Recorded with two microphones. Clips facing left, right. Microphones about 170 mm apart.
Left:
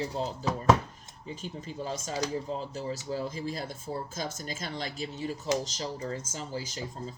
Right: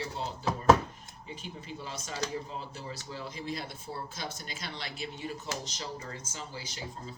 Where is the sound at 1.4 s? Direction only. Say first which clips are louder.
Left 7 dB; 40° left (ahead or behind).